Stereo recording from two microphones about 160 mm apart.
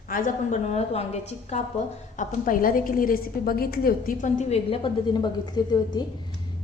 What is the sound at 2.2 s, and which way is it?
A woman's voice, 55° left (ahead or behind).